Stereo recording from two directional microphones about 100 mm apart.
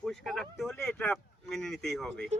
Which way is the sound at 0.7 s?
20° left (ahead or behind).